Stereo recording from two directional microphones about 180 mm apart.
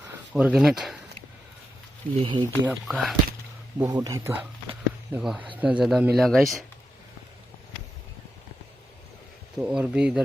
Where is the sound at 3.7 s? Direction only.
20° right (ahead or behind); by 6.6 s centre (ahead or behind).